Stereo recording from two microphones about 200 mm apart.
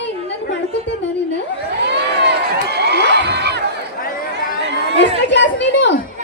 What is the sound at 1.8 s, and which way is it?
Crowd, 60° right (ahead or behind).